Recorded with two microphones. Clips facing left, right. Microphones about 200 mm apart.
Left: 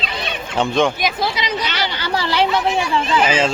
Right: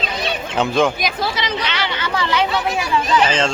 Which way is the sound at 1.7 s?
35° left (ahead or behind).